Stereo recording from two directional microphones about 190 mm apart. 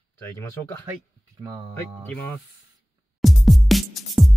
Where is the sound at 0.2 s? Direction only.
15° left (ahead or behind).